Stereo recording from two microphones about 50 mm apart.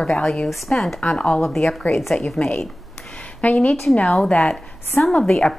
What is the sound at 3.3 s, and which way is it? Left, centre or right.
Speech, left.